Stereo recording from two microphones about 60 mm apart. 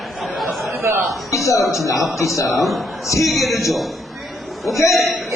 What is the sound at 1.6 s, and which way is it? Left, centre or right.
A man's voice, centre.